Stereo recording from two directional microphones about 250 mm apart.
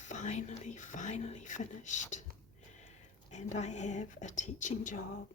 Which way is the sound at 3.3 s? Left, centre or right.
Left.